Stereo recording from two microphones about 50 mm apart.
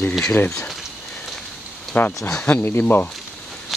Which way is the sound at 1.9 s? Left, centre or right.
Left.